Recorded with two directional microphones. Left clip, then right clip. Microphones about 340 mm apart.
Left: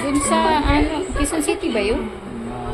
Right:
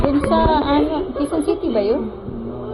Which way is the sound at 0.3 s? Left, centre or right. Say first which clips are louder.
Even; left.